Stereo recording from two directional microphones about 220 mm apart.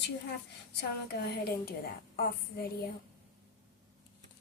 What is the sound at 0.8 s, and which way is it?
A child's voice, 45° left (ahead or behind).